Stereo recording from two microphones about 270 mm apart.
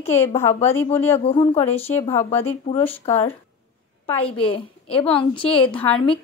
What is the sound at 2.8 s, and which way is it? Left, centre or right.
Speech, centre.